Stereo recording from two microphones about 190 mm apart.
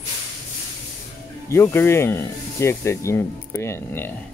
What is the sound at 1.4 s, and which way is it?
Speech, 15° left (ahead or behind).